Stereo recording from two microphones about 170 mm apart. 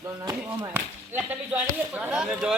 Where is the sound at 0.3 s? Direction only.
10° right (ahead or behind).